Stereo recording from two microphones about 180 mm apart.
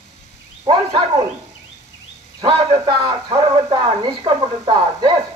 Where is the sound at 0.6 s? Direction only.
25° right (ahead or behind).